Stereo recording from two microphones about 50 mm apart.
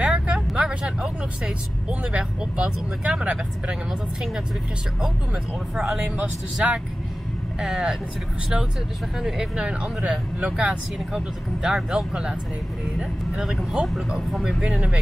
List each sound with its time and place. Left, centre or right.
0.0 s vehicle: centre
0.6 s speech: centre
5.0 s speech: centre
7.6 s speech: centre
9.2 s speech: centre